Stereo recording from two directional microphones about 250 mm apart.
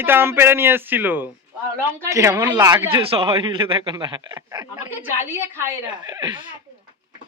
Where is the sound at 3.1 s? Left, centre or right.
Right.